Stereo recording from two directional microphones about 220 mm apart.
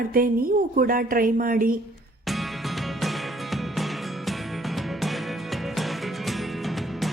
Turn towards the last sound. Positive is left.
turn(degrees=0)  # may be behind; listen again after turning